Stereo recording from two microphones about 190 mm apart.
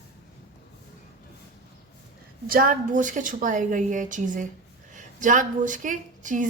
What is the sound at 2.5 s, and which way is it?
A woman's voice, 50° right (ahead or behind).